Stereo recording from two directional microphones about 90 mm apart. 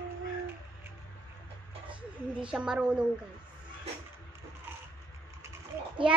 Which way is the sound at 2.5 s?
10° right (ahead or behind).